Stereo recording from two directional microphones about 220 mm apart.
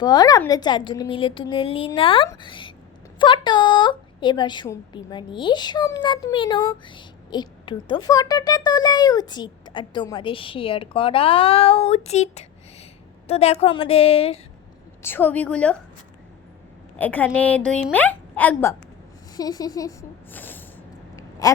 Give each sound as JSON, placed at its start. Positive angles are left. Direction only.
{"t": 0.0, "sound": "speech", "side_deg": 20}
{"t": 15.0, "sound": "a woman's voice", "side_deg": 10}
{"t": 17.0, "sound": "a woman's voice", "side_deg": 10}
{"t": 21.2, "sound": "a sound", "side_deg": 15}